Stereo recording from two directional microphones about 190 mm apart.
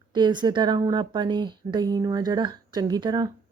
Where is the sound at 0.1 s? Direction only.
25° right (ahead or behind).